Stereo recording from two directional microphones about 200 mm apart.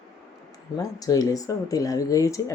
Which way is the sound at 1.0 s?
15° left (ahead or behind).